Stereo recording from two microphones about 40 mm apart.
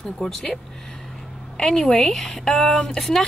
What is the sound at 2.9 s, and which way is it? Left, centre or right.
Speech, centre.